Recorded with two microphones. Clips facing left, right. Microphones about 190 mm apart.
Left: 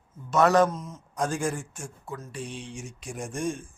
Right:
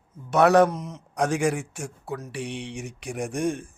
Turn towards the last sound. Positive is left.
turn(degrees=-65)  # may be behind; listen again after turning